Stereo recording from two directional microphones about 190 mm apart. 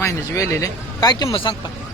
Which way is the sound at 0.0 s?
15° left (ahead or behind).